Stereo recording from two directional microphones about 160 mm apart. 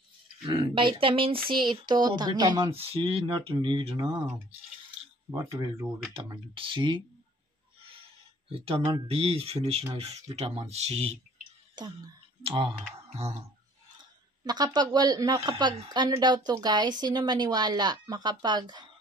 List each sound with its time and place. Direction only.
0.5 s speech: 30° right (ahead or behind)
5.3 s speech: 20° right (ahead or behind)
6.1 s speech: 35° right (ahead or behind)
8.5 s speech: 35° right (ahead or behind)
11.7 s speech: 25° right (ahead or behind)
13.1 s music: 45° right (ahead or behind)
14.4 s speech: 25° right (ahead or behind)